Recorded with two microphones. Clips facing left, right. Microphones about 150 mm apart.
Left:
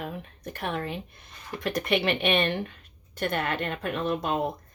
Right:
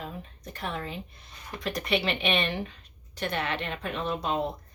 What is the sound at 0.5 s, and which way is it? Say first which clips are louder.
Speech: left 3 dB; 55° left (ahead or behind).